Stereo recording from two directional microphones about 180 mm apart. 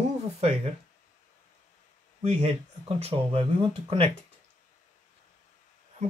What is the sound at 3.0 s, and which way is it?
Speech, 35° right (ahead or behind).